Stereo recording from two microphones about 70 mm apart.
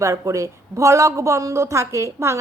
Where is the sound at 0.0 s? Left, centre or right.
Right.